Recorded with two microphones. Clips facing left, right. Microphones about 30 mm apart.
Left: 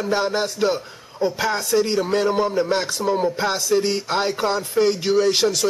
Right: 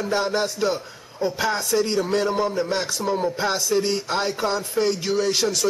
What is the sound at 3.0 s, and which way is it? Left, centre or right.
A man's voice, centre.